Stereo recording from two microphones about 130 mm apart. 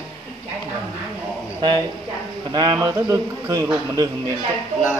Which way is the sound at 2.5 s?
30° right (ahead or behind).